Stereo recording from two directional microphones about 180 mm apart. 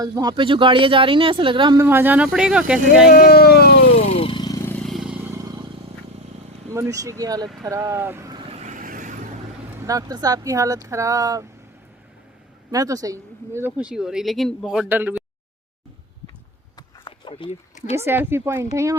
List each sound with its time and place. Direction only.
0.0 s speech: 20° right (ahead or behind)
1.9 s speech: 10° right (ahead or behind)
3.1 s speech: 55° left (ahead or behind)
3.9 s vehicle: 35° left (ahead or behind); by 5.1 s centre (ahead or behind)
6.7 s speech: 15° right (ahead or behind)
8.6 s vehicle: 45° right (ahead or behind)
9.7 s speech: 20° right (ahead or behind)
12.7 s speech: 20° right (ahead or behind)
17.1 s a sound: 30° left (ahead or behind)
17.9 s speech: 15° right (ahead or behind)